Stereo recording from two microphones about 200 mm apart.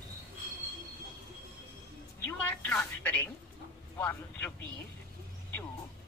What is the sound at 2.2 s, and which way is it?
Telephone, 10° left (ahead or behind).